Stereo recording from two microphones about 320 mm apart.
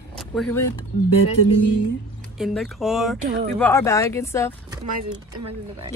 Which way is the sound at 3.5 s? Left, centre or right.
Centre.